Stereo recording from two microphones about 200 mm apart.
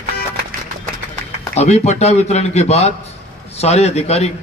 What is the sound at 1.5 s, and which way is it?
A man's voice, 35° left (ahead or behind).